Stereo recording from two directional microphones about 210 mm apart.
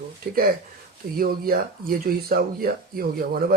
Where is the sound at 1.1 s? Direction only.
45° right (ahead or behind).